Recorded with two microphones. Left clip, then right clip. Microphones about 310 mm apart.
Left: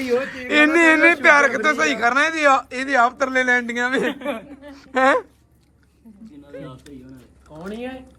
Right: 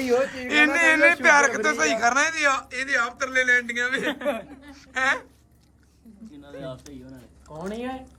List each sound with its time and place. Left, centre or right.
0.3 s a man's voice: centre
6.5 s a sound: centre
7.7 s speech: right